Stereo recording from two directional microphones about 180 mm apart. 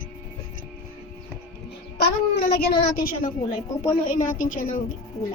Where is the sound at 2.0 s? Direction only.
65° left (ahead or behind).